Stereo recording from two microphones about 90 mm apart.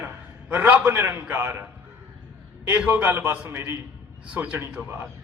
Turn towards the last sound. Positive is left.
turn(degrees=-25)  # may be behind; listen again after turning